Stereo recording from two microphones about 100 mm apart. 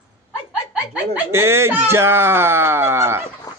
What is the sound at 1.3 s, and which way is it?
Speech, 25° right (ahead or behind).